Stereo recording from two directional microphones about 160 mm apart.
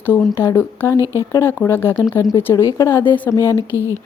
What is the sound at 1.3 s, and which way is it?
A woman's voice, 15° left (ahead or behind).